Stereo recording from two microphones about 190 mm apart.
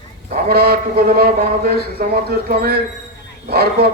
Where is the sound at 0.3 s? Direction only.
50° right (ahead or behind).